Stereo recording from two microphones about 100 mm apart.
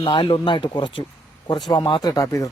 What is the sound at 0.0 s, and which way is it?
Speech, 60° left (ahead or behind).